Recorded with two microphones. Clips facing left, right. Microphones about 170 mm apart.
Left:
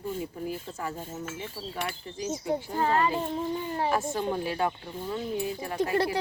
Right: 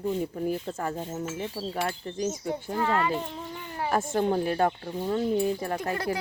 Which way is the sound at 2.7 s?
35° left (ahead or behind).